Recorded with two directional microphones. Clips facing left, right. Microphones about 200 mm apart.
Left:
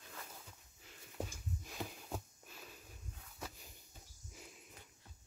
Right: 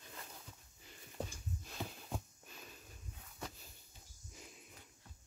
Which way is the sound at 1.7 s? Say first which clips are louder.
Even; 5° left (ahead or behind).